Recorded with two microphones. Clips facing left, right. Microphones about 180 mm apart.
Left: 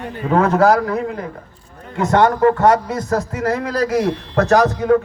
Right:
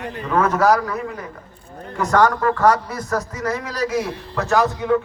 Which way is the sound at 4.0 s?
65° left (ahead or behind).